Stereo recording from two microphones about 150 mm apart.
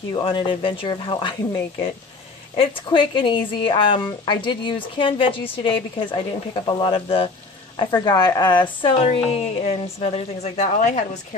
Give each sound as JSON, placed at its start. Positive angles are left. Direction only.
{"t": 0.1, "sound": "a woman's voice", "side_deg": 35}
{"t": 2.6, "sound": "a woman's voice", "side_deg": 35}